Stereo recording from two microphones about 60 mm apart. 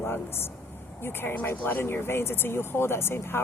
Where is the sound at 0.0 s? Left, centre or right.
Left.